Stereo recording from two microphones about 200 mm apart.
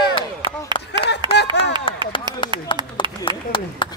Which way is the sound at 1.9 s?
25° left (ahead or behind).